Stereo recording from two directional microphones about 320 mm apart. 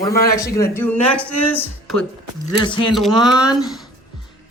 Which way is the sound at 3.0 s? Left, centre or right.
Centre.